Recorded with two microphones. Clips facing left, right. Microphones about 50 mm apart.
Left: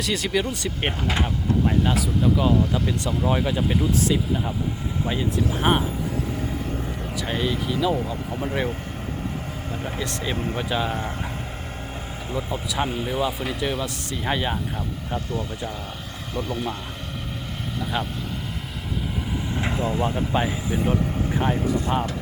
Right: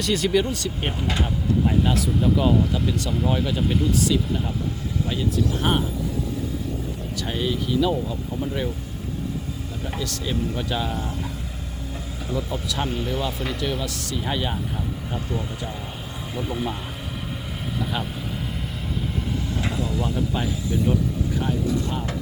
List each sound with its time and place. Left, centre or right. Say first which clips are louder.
0.0 s speech: right 3 dB; centre
1.6 s speech: even; centre
3.9 s speech: even; left
5.6 s speech: left 3 dB; left
7.3 s speech: even; centre
8.0 s speech: even; left
9.8 s speech: even; left
10.3 s speech: even; left
12.3 s speech: right 1 dB; left
12.6 s speech: left 1 dB; centre
16.3 s speech: even; centre
17.9 s speech: left 5 dB; centre
19.5 s speech: left 4 dB; left